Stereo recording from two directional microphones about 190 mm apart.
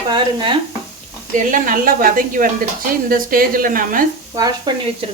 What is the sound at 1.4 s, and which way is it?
Speech, 45° right (ahead or behind).